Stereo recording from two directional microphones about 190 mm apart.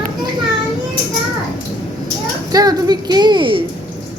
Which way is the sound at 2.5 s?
20° right (ahead or behind).